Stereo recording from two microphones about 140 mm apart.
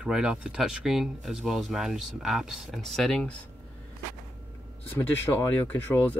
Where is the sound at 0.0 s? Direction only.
5° right (ahead or behind).